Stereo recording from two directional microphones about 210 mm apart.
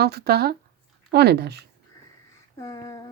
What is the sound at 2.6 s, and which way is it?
Speech, 15° left (ahead or behind).